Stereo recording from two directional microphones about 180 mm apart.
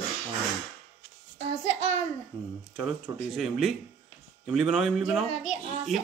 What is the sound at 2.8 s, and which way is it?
Speech, 10° right (ahead or behind).